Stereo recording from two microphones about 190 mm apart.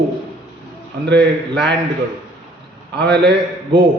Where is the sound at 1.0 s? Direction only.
65° right (ahead or behind).